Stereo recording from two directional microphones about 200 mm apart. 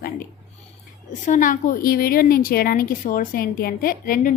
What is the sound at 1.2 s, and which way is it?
A woman's voice, 40° left (ahead or behind).